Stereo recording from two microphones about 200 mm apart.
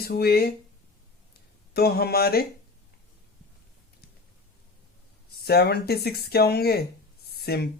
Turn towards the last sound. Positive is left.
turn(degrees=50)  # may be behind; listen again after turning